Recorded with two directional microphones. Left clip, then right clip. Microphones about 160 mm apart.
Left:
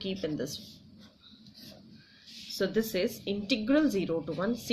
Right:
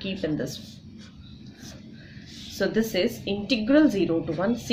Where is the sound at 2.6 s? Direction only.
35° left (ahead or behind).